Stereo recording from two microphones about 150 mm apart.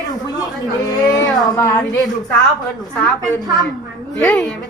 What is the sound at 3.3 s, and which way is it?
Speech, 25° right (ahead or behind).